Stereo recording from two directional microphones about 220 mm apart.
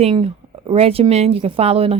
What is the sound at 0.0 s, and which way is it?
A woman's voice, 25° right (ahead or behind).